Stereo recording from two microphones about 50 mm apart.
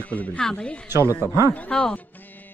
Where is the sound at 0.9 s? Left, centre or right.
Right.